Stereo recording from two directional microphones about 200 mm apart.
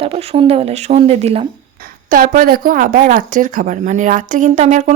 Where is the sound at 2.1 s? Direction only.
40° right (ahead or behind).